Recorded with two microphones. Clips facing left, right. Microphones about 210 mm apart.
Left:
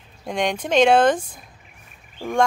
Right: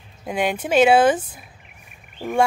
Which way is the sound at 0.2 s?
5° right (ahead or behind).